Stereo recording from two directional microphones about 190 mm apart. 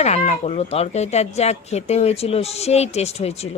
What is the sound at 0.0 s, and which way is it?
Speech, 35° left (ahead or behind).